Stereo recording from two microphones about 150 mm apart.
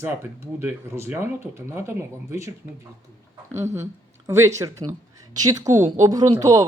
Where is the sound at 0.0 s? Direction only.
15° right (ahead or behind).